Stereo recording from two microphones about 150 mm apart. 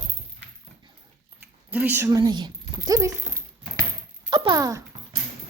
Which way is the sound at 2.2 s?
30° right (ahead or behind).